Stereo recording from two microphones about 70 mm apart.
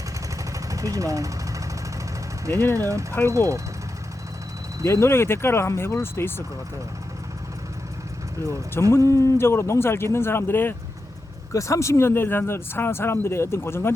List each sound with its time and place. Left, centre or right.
0.7 s vehicle: right
2.7 s speech: right
4.9 s speech: left
8.9 s speech: left
11.5 s speech: left